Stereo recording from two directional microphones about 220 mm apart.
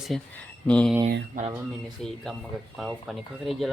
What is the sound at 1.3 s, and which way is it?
Speech, 40° right (ahead or behind).